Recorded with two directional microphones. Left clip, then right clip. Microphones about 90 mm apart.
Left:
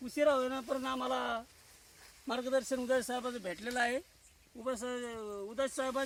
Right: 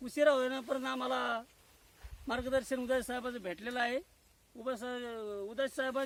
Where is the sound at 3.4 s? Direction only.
85° left.